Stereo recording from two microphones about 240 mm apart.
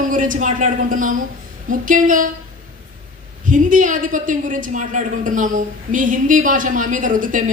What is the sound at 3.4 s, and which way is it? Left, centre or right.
A woman's voice, right.